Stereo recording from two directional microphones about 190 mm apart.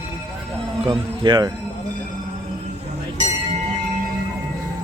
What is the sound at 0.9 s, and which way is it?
Speech, 20° right (ahead or behind).